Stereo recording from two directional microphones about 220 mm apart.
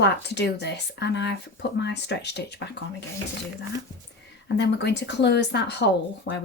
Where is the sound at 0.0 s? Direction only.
50° left (ahead or behind).